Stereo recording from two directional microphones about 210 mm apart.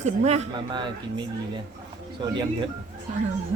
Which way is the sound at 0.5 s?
20° right (ahead or behind).